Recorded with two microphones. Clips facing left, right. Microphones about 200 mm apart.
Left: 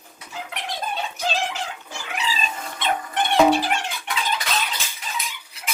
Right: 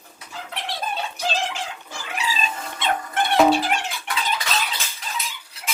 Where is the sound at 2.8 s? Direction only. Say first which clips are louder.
Even; 10° left (ahead or behind).